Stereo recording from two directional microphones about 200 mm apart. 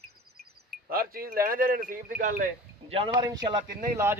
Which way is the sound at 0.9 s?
45° right (ahead or behind).